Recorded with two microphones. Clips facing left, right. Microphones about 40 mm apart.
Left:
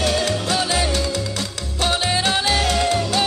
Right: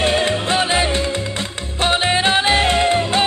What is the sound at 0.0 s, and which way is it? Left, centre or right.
Music, right.